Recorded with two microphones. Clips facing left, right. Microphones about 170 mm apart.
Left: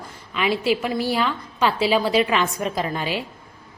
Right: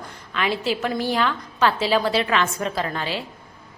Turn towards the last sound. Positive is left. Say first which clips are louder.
# left 1 dB
turn(degrees=10)  # may be behind; listen again after turning